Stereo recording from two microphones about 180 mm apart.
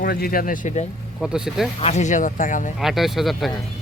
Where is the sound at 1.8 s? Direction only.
40° left (ahead or behind).